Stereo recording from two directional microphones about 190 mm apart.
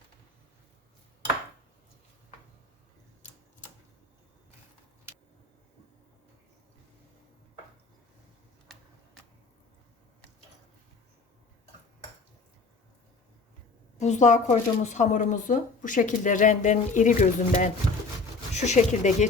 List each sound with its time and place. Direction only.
14.0 s speech: 40° left (ahead or behind)